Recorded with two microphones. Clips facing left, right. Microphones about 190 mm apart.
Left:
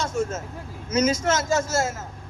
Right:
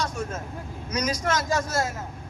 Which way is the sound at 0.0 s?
25° left (ahead or behind).